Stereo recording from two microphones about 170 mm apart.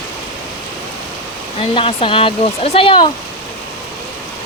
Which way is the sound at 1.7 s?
35° left (ahead or behind).